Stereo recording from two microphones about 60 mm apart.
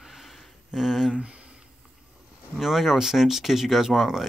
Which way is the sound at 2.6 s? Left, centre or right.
Centre.